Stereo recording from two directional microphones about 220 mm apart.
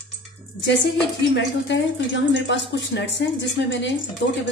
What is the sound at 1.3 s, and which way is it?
A woman's voice, 55° left (ahead or behind).